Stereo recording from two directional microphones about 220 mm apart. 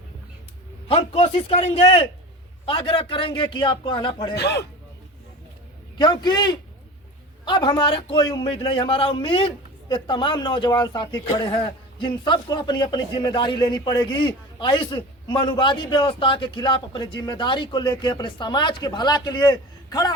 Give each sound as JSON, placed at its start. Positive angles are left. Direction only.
{"t": 0.9, "sound": "speech", "side_deg": 25}
{"t": 4.4, "sound": "a man's voice", "side_deg": 50}
{"t": 6.0, "sound": "speech", "side_deg": 20}